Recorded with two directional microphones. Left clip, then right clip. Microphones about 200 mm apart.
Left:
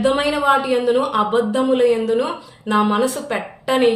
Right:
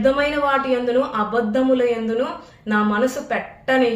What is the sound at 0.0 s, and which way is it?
Speech, 15° left (ahead or behind).